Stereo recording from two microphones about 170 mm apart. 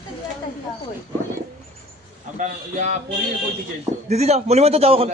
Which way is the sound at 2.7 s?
45° right (ahead or behind).